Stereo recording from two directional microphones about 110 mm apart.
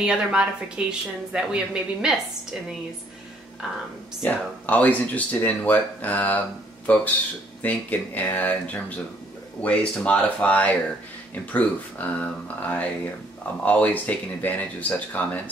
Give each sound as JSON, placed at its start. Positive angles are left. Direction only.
{"t": 0.0, "sound": "speech", "side_deg": -5}
{"t": 4.2, "sound": "speech", "side_deg": 15}